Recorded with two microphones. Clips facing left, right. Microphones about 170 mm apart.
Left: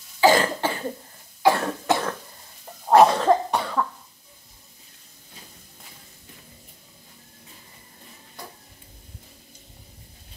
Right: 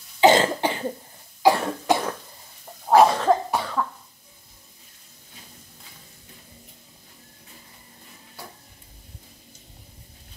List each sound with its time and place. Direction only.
0.2 s cough: 20° right (ahead or behind)
2.9 s cough: centre (ahead or behind)